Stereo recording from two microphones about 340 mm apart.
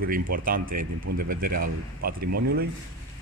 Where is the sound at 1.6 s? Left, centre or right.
Right.